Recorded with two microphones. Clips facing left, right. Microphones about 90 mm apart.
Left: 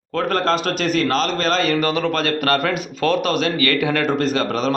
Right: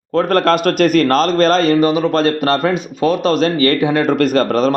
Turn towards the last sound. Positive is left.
turn(degrees=-45)  # may be behind; listen again after turning